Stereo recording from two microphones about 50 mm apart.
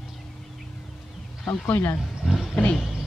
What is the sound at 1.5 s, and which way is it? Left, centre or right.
Speech, left.